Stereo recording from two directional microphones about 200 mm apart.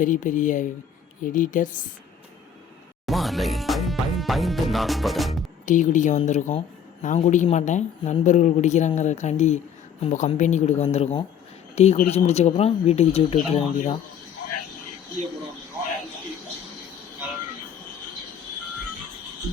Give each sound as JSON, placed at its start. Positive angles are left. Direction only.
{"t": 0.0, "sound": "speech", "side_deg": 40}
{"t": 3.1, "sound": "speech", "side_deg": 0}
{"t": 5.6, "sound": "speech", "side_deg": 40}